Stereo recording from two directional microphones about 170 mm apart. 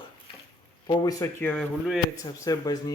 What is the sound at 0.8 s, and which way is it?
Speech, 20° left (ahead or behind).